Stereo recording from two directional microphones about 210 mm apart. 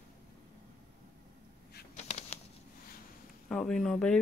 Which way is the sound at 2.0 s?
30° left (ahead or behind).